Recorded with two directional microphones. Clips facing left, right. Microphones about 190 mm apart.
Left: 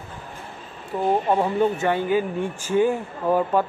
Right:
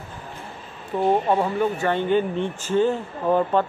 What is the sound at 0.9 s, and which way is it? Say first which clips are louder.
Speech: right 2 dB; 5° left (ahead or behind).